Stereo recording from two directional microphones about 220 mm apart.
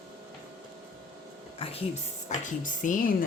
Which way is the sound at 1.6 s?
25° left (ahead or behind).